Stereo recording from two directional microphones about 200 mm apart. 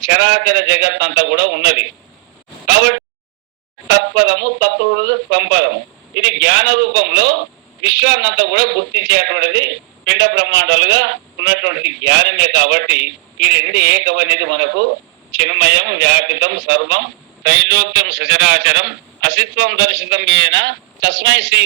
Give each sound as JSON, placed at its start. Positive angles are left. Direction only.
{"t": 0.1, "sound": "a man's voice", "side_deg": -60}